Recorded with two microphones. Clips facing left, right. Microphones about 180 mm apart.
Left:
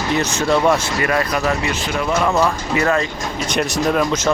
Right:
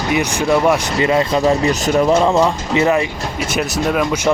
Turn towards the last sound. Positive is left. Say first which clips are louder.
# right 1 dB
turn(degrees=-10)  # may be behind; listen again after turning